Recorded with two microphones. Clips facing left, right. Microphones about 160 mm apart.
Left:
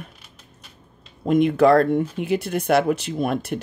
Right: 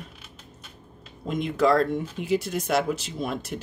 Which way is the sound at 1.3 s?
60° left (ahead or behind).